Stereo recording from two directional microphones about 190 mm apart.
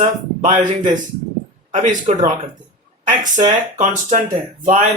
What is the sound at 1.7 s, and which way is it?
Speech, 45° right (ahead or behind).